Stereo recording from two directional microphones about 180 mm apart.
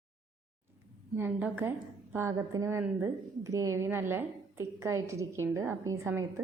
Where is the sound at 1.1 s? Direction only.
10° right (ahead or behind).